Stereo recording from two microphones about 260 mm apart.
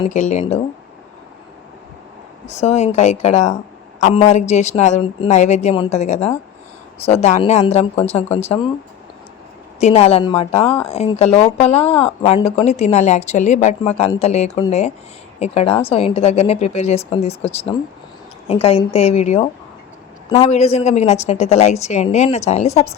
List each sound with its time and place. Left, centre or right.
0.0 s speech: left
2.6 s speech: left
9.8 s speech: left